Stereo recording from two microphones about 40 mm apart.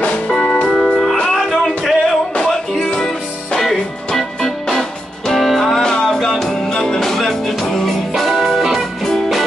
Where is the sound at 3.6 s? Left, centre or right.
Centre.